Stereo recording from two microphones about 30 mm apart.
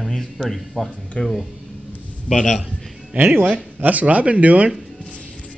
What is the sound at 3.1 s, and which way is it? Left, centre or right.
Speech, right.